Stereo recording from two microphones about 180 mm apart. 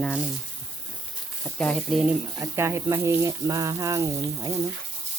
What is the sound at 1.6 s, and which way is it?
Speech, centre (ahead or behind).